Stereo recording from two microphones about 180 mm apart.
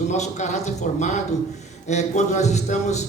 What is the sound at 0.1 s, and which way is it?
A man's voice, 40° left (ahead or behind).